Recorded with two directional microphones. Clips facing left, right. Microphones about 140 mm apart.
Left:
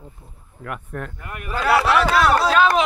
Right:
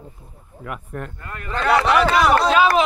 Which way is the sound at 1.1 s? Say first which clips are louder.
Even; 15° left (ahead or behind).